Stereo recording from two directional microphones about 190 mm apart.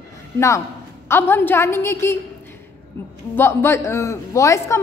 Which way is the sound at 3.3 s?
15° left (ahead or behind).